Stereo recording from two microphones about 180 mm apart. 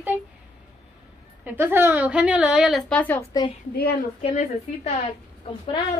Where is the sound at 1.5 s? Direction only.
10° right (ahead or behind); by 3.2 s 10° left (ahead or behind).